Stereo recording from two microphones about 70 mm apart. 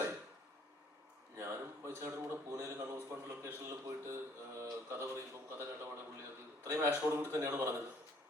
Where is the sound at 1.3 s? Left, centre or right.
Right.